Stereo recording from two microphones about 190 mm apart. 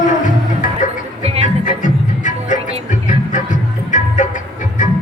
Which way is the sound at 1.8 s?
40° left (ahead or behind).